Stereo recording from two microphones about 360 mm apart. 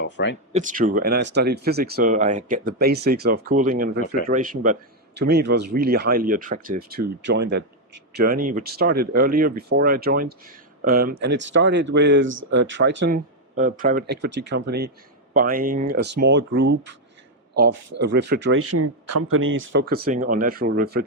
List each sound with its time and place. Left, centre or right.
0.0 s speech: left
0.5 s speech: right
18.0 s speech: right